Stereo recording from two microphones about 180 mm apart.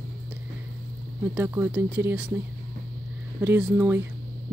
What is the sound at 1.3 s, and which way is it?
Speech, 10° right (ahead or behind).